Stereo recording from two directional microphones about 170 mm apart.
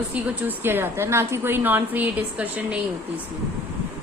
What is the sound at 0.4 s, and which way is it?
A woman's voice, 15° right (ahead or behind).